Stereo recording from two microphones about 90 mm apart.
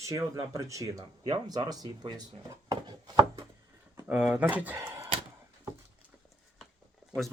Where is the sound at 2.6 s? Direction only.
50° right (ahead or behind).